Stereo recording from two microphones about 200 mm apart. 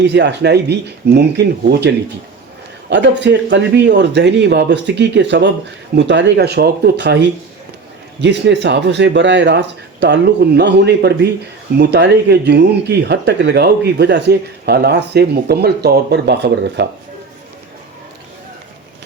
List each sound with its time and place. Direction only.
0.0 s speech: 60° right (ahead or behind)
2.9 s speech: 60° right (ahead or behind)